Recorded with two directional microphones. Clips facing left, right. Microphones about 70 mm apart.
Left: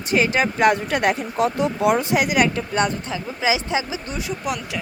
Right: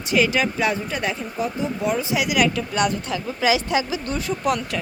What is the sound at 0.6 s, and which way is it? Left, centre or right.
Speech, left.